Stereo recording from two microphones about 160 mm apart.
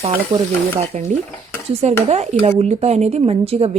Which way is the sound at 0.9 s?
40° right (ahead or behind).